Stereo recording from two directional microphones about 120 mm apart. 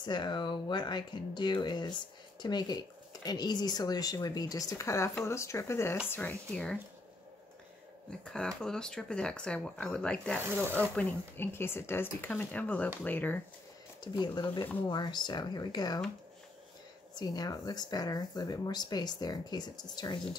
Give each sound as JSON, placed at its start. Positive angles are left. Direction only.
{"t": 0.0, "sound": "speech", "side_deg": 40}
{"t": 8.1, "sound": "speech", "side_deg": 5}
{"t": 10.4, "sound": "speech", "side_deg": -20}
{"t": 10.7, "sound": "speech", "side_deg": 15}
{"t": 14.0, "sound": "speech", "side_deg": 35}
{"t": 17.1, "sound": "speech", "side_deg": 35}